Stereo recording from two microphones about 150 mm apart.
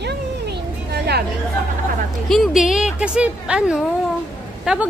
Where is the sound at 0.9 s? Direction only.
90° right.